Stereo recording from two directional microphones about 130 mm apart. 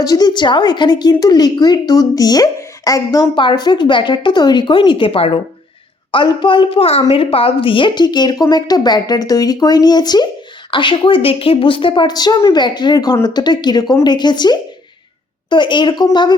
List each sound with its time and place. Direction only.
0.0 s speech: 30° left (ahead or behind)